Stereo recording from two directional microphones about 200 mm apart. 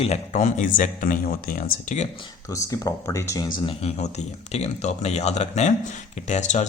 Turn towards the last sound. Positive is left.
turn(degrees=35)  # may be behind; listen again after turning